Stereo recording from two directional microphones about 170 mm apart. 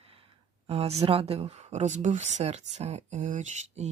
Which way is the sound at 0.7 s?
40° right (ahead or behind).